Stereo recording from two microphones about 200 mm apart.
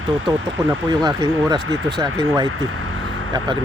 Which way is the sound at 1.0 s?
20° right (ahead or behind).